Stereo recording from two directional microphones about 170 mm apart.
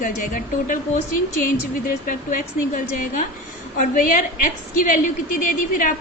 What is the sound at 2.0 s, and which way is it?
Speech, 50° left (ahead or behind).